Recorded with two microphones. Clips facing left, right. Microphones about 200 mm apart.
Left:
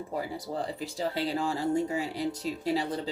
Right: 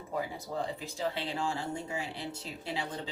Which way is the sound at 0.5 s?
35° left (ahead or behind).